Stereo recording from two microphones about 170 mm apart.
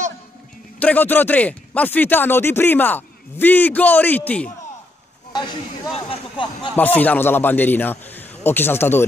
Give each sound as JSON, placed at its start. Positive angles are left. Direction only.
{"t": 0.7, "sound": "speech", "side_deg": 10}
{"t": 5.3, "sound": "speech", "side_deg": 25}
{"t": 6.7, "sound": "speech", "side_deg": 10}